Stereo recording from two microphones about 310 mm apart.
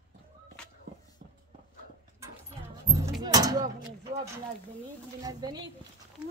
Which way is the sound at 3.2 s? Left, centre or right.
Centre.